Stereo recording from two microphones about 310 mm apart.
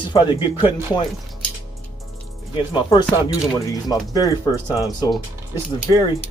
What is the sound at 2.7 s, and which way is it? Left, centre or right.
Speech, centre.